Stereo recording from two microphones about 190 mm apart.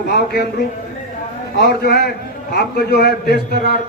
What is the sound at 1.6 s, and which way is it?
A man's voice, 60° left (ahead or behind).